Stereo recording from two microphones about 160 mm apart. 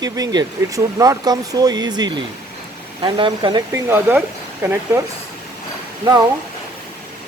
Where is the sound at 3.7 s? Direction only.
15° right (ahead or behind).